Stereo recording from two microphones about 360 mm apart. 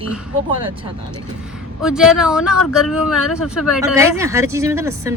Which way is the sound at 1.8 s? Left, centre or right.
Centre.